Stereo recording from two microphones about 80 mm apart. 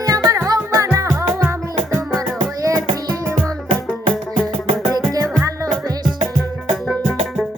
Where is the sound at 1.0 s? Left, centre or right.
Centre.